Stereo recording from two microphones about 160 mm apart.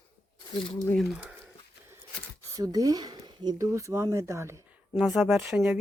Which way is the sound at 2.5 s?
20° right (ahead or behind).